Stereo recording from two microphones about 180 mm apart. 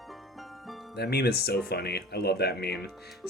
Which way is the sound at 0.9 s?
65° left (ahead or behind).